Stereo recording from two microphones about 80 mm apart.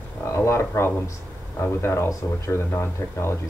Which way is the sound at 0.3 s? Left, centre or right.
Left.